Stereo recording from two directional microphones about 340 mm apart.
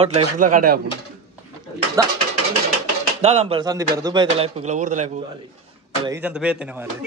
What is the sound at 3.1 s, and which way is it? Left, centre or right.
Speech, centre.